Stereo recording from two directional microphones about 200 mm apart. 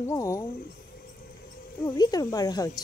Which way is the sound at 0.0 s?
15° left (ahead or behind).